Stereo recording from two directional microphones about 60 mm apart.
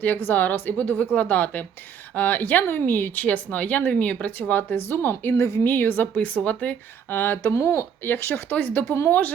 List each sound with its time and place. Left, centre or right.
0.0 s a woman's voice: left
5.4 s a woman's voice: left
5.6 s a woman's voice: left
7.1 s a woman's voice: left